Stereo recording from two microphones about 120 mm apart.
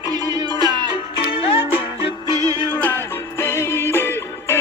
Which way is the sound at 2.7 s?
15° left (ahead or behind).